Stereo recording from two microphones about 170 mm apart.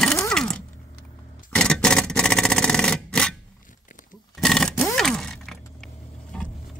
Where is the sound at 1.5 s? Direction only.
5° left (ahead or behind).